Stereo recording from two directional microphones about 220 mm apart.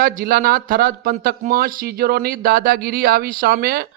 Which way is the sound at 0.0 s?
40° right (ahead or behind).